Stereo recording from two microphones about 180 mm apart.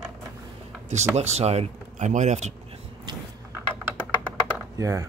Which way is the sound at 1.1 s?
35° right (ahead or behind).